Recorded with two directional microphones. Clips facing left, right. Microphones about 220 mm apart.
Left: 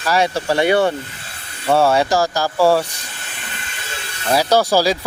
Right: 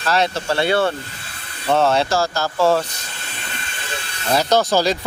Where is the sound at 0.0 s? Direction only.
10° left (ahead or behind).